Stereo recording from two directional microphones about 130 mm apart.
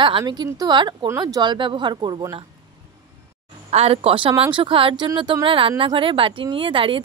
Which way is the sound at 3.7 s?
50° right (ahead or behind).